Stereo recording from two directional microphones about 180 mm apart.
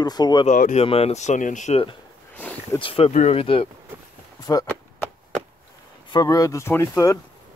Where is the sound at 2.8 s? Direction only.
35° left (ahead or behind).